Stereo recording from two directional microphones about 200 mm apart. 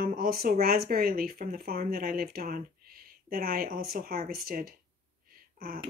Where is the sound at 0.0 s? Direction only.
45° right (ahead or behind).